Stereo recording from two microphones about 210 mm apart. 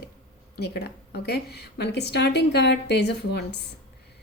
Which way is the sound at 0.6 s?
50° left (ahead or behind).